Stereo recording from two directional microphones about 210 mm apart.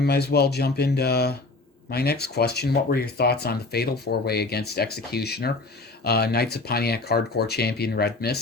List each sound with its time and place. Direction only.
0.0 s speech: 50° left (ahead or behind)